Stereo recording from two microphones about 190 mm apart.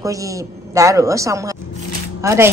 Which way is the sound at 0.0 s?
15° right (ahead or behind).